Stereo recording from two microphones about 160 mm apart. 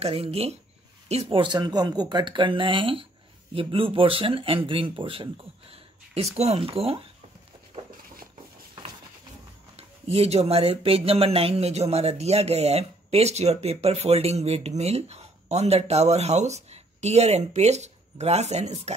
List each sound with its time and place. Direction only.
0.0 s speech: 40° right (ahead or behind)
7.7 s a sound: 40° right (ahead or behind)
9.8 s speech: 40° right (ahead or behind)